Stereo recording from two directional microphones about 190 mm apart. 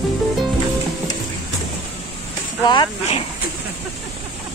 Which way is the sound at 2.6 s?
25° left (ahead or behind).